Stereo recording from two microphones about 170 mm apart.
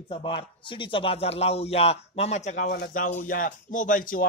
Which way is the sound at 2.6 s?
65° left (ahead or behind).